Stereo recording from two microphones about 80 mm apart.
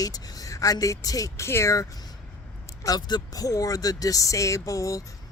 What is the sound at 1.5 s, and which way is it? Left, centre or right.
Speech, left.